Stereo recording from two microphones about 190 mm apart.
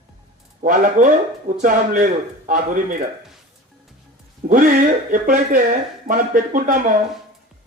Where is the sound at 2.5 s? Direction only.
45° right (ahead or behind).